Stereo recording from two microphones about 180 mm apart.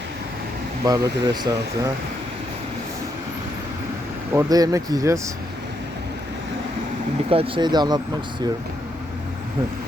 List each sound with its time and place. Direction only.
0.9 s speech: 20° right (ahead or behind)
4.4 s speech: 20° right (ahead or behind)
7.3 s speech: 30° right (ahead or behind)